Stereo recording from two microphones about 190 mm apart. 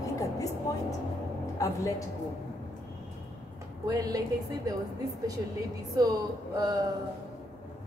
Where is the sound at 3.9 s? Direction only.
20° right (ahead or behind).